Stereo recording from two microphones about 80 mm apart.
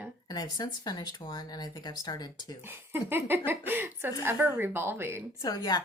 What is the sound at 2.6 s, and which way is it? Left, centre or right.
A woman's voice, right.